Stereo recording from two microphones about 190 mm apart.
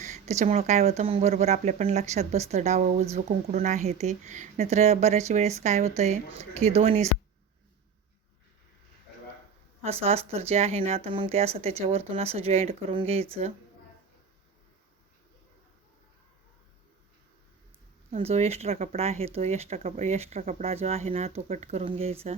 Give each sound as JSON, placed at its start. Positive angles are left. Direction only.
{"t": 0.0, "sound": "speech", "side_deg": -35}
{"t": 9.8, "sound": "speech", "side_deg": -30}
{"t": 18.1, "sound": "speech", "side_deg": -35}